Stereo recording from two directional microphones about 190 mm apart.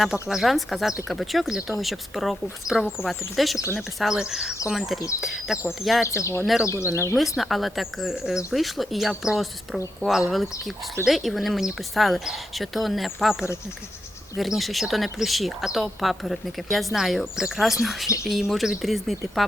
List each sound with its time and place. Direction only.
0.0 s speech: centre (ahead or behind)
6.1 s speech: 15° left (ahead or behind)
6.4 s speech: centre (ahead or behind)
6.7 s speech: 15° left (ahead or behind)
7.2 s speech: centre (ahead or behind)